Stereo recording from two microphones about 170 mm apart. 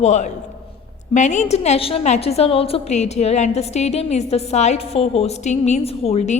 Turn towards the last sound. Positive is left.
turn(degrees=40)  # may be behind; listen again after turning